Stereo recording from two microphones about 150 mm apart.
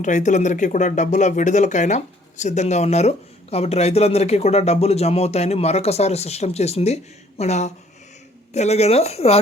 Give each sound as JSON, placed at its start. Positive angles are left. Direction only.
{"t": 0.0, "sound": "speech", "side_deg": 55}